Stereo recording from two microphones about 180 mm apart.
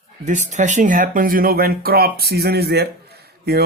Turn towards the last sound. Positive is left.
turn(degrees=-60)  # may be behind; listen again after turning